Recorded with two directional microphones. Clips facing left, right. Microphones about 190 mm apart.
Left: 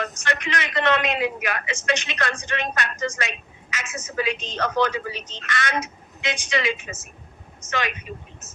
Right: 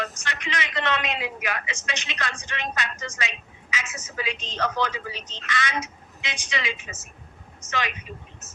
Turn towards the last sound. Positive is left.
turn(degrees=50)  # may be behind; listen again after turning